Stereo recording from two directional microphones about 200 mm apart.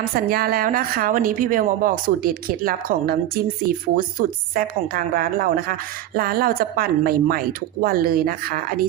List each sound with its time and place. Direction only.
0.3 s speech: 50° right (ahead or behind)